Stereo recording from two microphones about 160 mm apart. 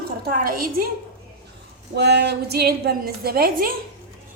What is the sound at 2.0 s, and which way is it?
A woman's voice, 90° right.